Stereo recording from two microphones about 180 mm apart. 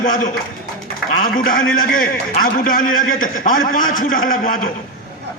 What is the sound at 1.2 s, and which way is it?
A man's voice, 55° left (ahead or behind).